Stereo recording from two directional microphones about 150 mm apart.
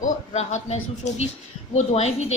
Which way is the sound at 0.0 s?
50° left (ahead or behind).